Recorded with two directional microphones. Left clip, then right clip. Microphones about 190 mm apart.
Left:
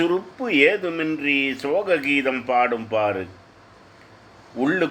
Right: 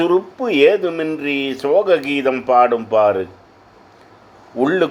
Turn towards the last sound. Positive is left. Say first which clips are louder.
# right 6 dB
turn(degrees=-15)  # may be behind; listen again after turning